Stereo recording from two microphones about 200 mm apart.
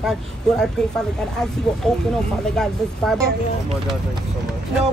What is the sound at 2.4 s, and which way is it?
Speech, 5° left (ahead or behind).